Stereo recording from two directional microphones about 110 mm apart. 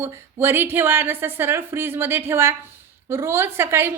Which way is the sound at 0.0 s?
20° right (ahead or behind).